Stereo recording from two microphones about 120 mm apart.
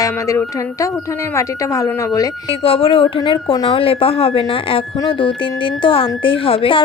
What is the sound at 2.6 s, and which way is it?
A woman's voice, 50° left (ahead or behind).